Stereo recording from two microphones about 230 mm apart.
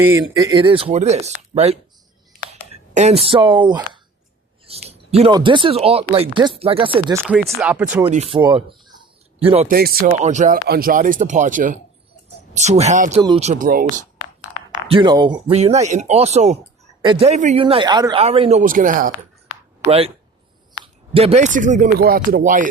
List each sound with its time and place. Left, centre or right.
0.0 s speech: centre
7.3 s speech: centre
8.0 s speech: right
9.6 s speech: right
10.2 s speech: right
14.8 s speech: centre; by 19.1 s right
19.9 s speech: right